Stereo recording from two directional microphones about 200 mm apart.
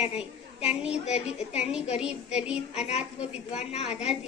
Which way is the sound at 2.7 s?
30° left (ahead or behind).